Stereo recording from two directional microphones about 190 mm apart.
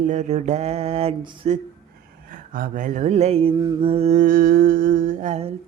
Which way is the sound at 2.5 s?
45° right (ahead or behind).